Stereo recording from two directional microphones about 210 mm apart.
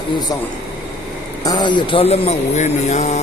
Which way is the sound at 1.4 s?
20° left (ahead or behind).